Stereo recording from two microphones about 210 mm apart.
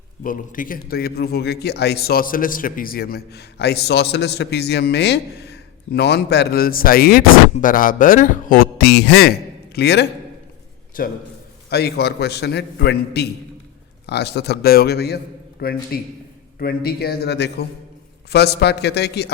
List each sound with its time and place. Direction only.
0.2 s a man's voice: 40° left (ahead or behind)
11.0 s a man's voice: 40° left (ahead or behind)